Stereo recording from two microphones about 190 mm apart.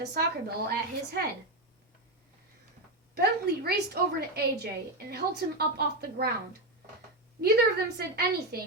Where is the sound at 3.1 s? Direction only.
55° right (ahead or behind).